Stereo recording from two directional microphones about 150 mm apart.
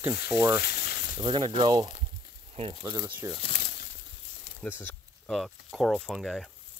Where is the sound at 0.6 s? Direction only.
90° left.